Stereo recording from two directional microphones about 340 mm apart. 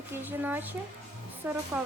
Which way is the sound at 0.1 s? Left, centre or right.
Centre.